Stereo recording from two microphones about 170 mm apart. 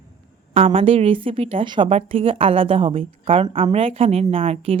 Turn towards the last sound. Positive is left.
turn(degrees=-35)  # may be behind; listen again after turning